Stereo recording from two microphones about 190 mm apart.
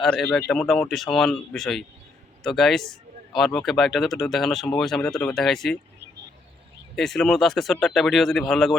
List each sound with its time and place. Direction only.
0.0 s speech: 5° left (ahead or behind)
6.9 s speech: centre (ahead or behind)